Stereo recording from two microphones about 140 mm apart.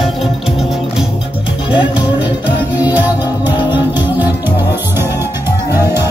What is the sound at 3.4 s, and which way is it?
Music, 35° left (ahead or behind).